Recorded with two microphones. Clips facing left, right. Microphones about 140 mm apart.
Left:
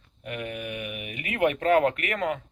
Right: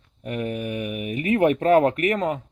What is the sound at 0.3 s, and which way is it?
Speech, 35° right (ahead or behind).